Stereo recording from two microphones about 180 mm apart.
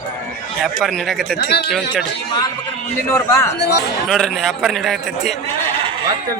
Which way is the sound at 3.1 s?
15° left (ahead or behind).